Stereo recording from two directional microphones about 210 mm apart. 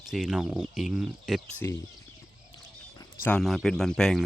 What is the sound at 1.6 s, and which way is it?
Speech, 15° left (ahead or behind).